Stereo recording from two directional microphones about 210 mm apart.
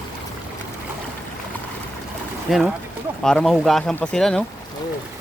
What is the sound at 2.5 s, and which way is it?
Speech, centre (ahead or behind).